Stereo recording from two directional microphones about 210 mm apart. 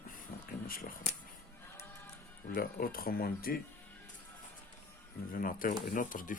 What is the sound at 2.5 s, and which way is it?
Speech, 45° left (ahead or behind).